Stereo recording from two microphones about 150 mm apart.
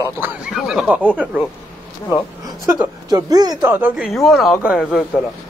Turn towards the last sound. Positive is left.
turn(degrees=0)  # may be behind; listen again after turning